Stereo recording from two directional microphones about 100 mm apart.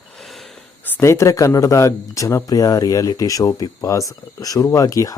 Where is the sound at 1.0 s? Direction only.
30° left (ahead or behind).